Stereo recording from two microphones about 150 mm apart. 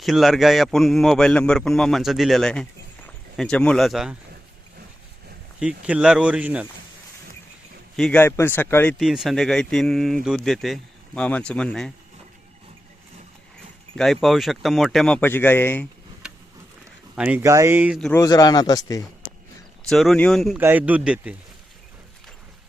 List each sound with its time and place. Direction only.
0.0 s speech: centre (ahead or behind)
5.5 s speech: 5° right (ahead or behind)
7.9 s speech: 5° left (ahead or behind)
8.2 s speech: 15° left (ahead or behind)
9.0 s speech: 5° right (ahead or behind)
13.9 s speech: centre (ahead or behind)
17.2 s speech: 10° right (ahead or behind)
17.4 s speech: 20° right (ahead or behind)
18.2 s speech: 25° left (ahead or behind)
19.9 s speech: centre (ahead or behind)
20.6 s speech: 10° right (ahead or behind)